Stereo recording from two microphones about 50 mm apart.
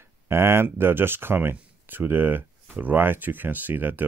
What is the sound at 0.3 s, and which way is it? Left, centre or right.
Speech, right.